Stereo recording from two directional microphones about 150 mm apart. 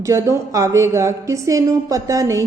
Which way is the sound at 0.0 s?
20° right (ahead or behind).